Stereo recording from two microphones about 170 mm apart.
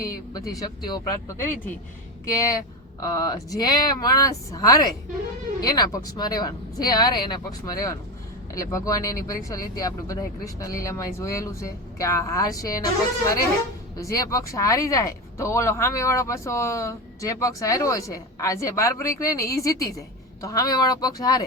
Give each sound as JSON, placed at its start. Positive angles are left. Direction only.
{"t": 0.5, "sound": "speech", "side_deg": 20}
{"t": 3.0, "sound": "speech", "side_deg": 20}